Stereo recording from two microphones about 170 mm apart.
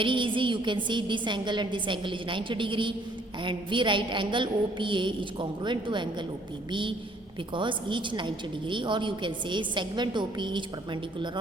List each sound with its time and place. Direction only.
0.0 s a woman's voice: 30° right (ahead or behind)